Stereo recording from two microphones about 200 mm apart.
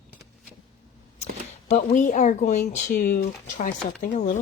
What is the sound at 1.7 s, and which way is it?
Speech, 40° left (ahead or behind).